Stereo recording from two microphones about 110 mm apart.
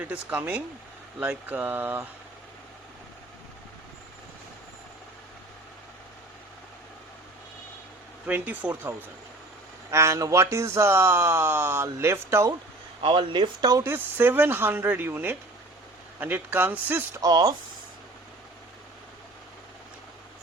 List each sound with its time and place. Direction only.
0.0 s speech: 10° right (ahead or behind)
8.3 s speech: 15° right (ahead or behind)
13.0 s speech: 50° right (ahead or behind)
13.8 s speech: 20° right (ahead or behind)
17.2 s speech: 35° right (ahead or behind)